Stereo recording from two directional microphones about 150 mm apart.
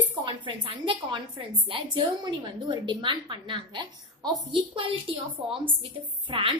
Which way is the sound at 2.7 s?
30° right (ahead or behind).